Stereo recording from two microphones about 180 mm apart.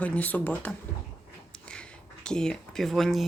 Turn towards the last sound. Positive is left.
turn(degrees=0)  # may be behind; listen again after turning